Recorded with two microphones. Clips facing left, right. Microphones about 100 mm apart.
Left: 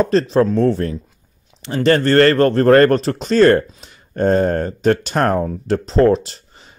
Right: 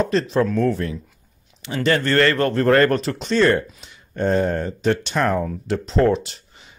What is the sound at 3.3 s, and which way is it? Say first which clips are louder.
Speech: left 6 dB; 45° left (ahead or behind).